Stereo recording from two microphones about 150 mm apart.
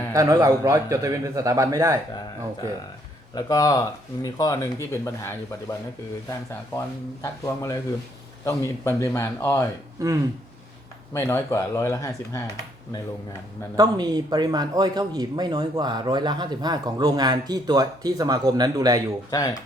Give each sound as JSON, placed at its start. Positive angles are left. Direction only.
{"t": 0.1, "sound": "speech", "side_deg": -25}
{"t": 3.3, "sound": "speech", "side_deg": 25}
{"t": 7.2, "sound": "speech", "side_deg": 20}
{"t": 10.0, "sound": "speech", "side_deg": -20}
{"t": 11.1, "sound": "speech", "side_deg": 15}
{"t": 13.7, "sound": "speech", "side_deg": -25}
{"t": 19.3, "sound": "speech", "side_deg": 20}